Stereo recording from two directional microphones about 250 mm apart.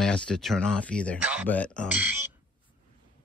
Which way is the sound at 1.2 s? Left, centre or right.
Centre.